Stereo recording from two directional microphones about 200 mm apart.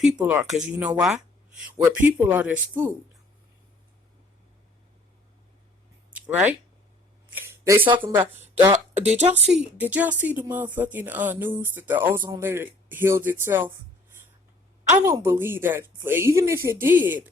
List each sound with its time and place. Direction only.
0.0 s speech: 5° right (ahead or behind)
6.1 s speech: 5° right (ahead or behind)
7.3 s a sound: 15° right (ahead or behind)
8.3 s speech: 10° right (ahead or behind)
8.7 s speech: 35° right (ahead or behind)
9.5 s speech: 5° right (ahead or behind)
14.8 s speech: 15° right (ahead or behind)